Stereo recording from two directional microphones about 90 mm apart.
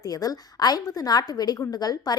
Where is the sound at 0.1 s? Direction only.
45° left (ahead or behind).